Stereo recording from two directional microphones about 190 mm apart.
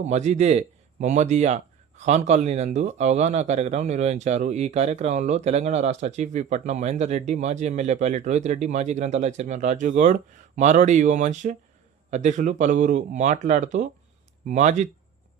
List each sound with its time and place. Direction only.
0.0 s speech: 35° right (ahead or behind)